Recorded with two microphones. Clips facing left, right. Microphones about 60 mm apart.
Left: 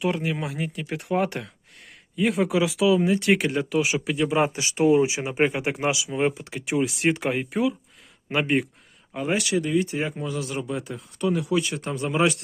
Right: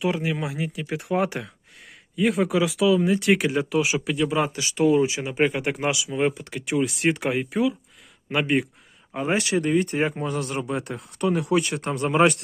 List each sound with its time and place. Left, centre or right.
0.0 s speech: centre
4.4 s speech: left
4.9 s speech: centre
9.1 s speech: right